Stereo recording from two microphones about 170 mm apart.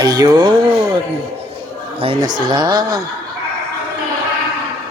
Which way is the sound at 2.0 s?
30° right (ahead or behind).